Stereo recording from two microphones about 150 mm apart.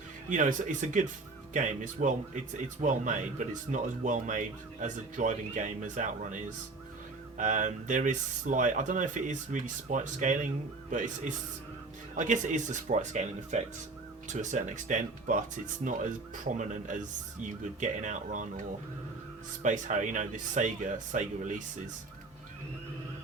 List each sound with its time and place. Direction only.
0.3 s speech: 55° right (ahead or behind)
7.3 s speech: 55° right (ahead or behind)
19.6 s speech: 55° right (ahead or behind)